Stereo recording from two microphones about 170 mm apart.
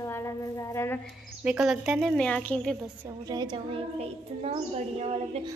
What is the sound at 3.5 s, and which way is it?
A woman's voice, 35° right (ahead or behind).